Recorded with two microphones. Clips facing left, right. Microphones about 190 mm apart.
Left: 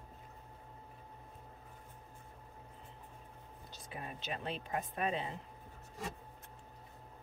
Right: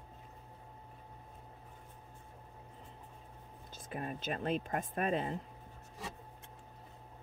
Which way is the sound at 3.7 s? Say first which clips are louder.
Right 6 dB; 50° right (ahead or behind).